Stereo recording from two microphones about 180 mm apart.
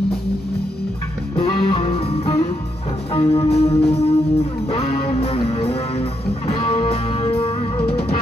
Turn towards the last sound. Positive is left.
turn(degrees=30)  # may be behind; listen again after turning